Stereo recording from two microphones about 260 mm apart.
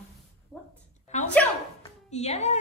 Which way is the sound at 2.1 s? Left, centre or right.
Left.